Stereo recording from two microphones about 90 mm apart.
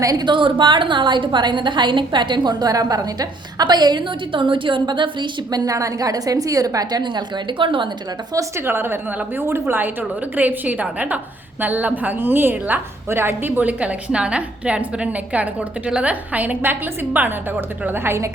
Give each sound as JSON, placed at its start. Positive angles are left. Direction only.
{"t": 0.0, "sound": "a woman's voice", "side_deg": -45}
{"t": 0.3, "sound": "a woman's voice", "side_deg": -70}
{"t": 7.0, "sound": "a woman's voice", "side_deg": -55}
{"t": 8.3, "sound": "a woman's voice", "side_deg": -35}
{"t": 8.6, "sound": "a woman's voice", "side_deg": -25}